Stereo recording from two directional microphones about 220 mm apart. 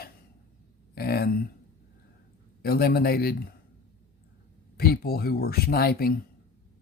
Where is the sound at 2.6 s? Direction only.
45° left (ahead or behind).